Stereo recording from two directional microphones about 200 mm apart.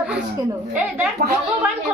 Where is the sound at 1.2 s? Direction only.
55° right (ahead or behind).